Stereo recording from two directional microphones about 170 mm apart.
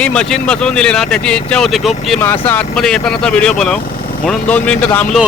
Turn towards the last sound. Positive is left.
turn(degrees=5)  # may be behind; listen again after turning